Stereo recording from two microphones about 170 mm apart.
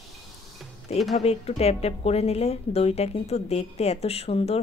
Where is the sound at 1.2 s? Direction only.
35° left (ahead or behind).